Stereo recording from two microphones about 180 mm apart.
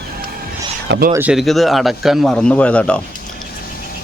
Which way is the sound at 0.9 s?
60° right (ahead or behind).